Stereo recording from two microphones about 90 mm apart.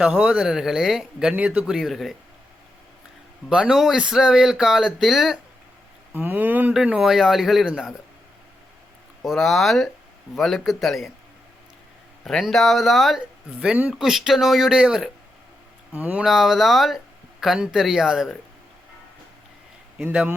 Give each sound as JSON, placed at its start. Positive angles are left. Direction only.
{"t": 0.0, "sound": "speech", "side_deg": -10}
{"t": 3.5, "sound": "speech", "side_deg": -5}
{"t": 6.1, "sound": "speech", "side_deg": -20}
{"t": 7.0, "sound": "speech", "side_deg": -5}
{"t": 9.2, "sound": "speech", "side_deg": 5}
{"t": 12.2, "sound": "speech", "side_deg": 5}
{"t": 15.9, "sound": "speech", "side_deg": -20}
{"t": 16.2, "sound": "speech", "side_deg": -5}